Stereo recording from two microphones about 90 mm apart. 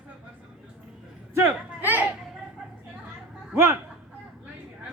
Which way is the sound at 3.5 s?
25° right (ahead or behind).